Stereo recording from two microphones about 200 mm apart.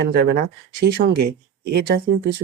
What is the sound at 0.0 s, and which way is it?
Speech, 55° right (ahead or behind).